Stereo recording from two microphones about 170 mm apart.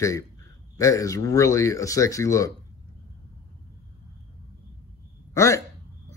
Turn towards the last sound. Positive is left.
turn(degrees=15)  # may be behind; listen again after turning